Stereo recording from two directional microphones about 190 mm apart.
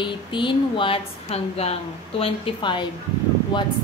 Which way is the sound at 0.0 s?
25° left (ahead or behind).